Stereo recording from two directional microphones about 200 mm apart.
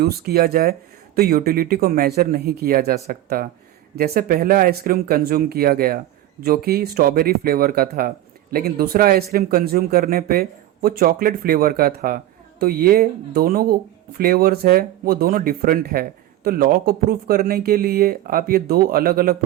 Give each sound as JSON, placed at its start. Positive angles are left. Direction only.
{"t": 0.0, "sound": "speech", "side_deg": -50}